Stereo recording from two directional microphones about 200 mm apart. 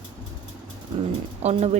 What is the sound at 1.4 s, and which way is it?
Speech, 35° right (ahead or behind).